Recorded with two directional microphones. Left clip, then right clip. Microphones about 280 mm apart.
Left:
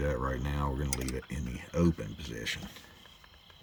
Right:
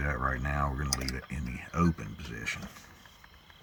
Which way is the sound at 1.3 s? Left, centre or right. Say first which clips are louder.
Even; left.